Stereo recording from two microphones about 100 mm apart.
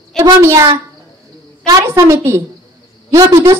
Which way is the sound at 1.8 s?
30° right (ahead or behind).